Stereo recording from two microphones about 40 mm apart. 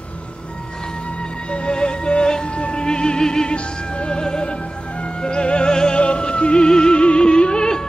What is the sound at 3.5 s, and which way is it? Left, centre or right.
Music, left.